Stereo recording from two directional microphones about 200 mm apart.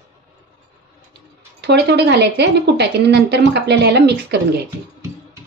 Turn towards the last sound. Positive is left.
turn(degrees=-55)  # may be behind; listen again after turning